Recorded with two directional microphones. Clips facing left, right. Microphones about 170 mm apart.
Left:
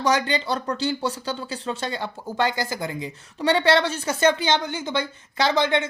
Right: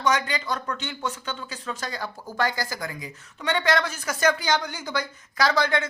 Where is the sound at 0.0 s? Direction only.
35° left (ahead or behind).